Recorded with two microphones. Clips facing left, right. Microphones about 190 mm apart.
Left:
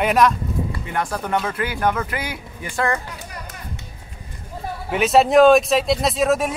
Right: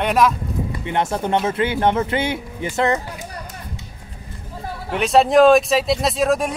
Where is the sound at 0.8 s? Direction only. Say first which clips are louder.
Right 4 dB; 25° right (ahead or behind).